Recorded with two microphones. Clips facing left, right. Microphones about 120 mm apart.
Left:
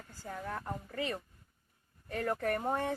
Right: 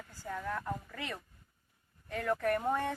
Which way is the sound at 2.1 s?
40° left (ahead or behind).